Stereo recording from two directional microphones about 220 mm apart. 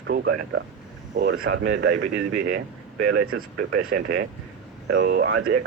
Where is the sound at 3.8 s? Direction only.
50° right (ahead or behind).